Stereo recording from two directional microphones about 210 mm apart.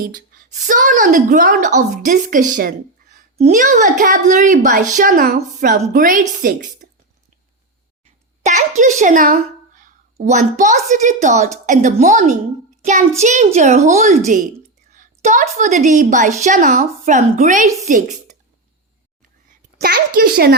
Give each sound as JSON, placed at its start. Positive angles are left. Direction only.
{"t": 0.1, "sound": "a woman's voice", "side_deg": -40}
{"t": 8.4, "sound": "a woman's voice", "side_deg": -35}
{"t": 19.8, "sound": "a child's voice", "side_deg": -45}